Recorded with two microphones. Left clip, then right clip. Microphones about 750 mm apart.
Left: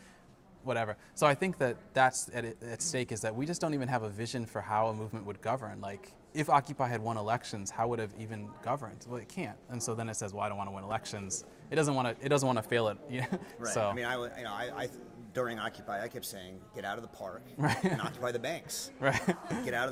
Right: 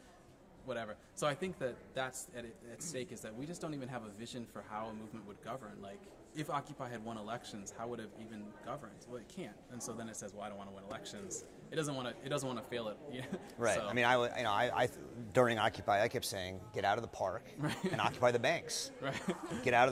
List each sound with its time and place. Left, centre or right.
0.7 s speech: left
13.9 s speech: right
17.6 s speech: left
18.0 s a man's voice: right
19.0 s speech: left
19.6 s a man's voice: right